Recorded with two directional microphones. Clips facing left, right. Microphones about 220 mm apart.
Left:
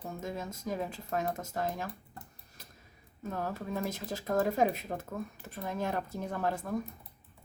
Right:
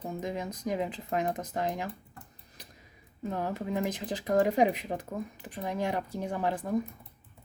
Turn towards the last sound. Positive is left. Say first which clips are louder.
# right 3 dB
turn(degrees=-15)  # may be behind; listen again after turning